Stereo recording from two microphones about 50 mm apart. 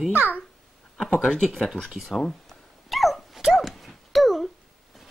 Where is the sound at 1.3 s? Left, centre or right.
Centre.